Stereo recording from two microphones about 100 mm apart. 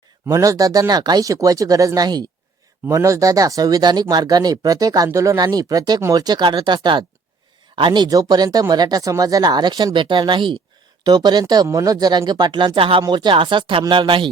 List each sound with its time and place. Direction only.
0.3 s speech: 35° right (ahead or behind); by 10.6 s 55° right (ahead or behind)
11.0 s speech: 45° right (ahead or behind); by 13.0 s 60° right (ahead or behind)
13.0 s speech: 50° right (ahead or behind)